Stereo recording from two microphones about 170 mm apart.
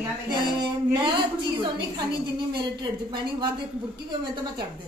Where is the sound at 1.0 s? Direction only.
30° right (ahead or behind).